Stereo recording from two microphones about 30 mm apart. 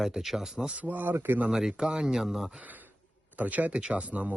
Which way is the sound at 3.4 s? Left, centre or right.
Right.